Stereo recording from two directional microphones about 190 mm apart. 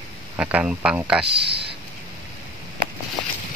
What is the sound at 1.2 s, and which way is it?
Speech, 60° right (ahead or behind).